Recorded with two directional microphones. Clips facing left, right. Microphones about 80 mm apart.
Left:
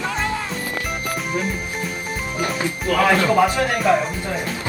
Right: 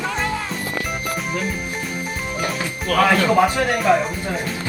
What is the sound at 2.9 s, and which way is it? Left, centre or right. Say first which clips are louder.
Speech: right 1 dB; left.